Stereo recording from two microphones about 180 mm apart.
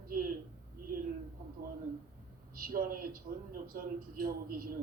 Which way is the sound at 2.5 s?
50° right (ahead or behind).